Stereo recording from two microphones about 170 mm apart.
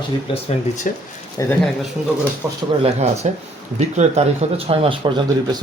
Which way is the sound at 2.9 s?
40° right (ahead or behind).